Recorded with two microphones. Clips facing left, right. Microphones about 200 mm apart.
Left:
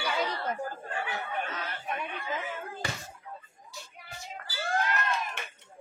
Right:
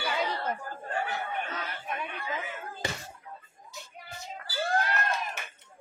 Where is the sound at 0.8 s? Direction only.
45° right (ahead or behind).